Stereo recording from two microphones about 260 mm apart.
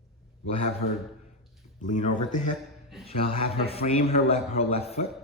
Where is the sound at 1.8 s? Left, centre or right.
Left.